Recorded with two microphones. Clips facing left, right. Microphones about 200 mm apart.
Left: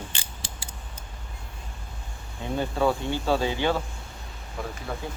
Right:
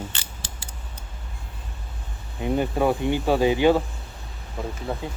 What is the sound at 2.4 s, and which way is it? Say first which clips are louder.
Speech: right 3 dB; 15° right (ahead or behind).